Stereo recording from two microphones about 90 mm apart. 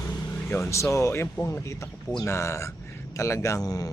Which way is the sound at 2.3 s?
30° left (ahead or behind).